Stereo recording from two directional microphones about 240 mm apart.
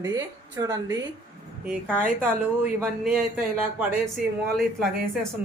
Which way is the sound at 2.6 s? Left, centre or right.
Centre.